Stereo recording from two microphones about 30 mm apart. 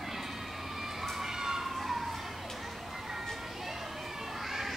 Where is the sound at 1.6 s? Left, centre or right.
Centre.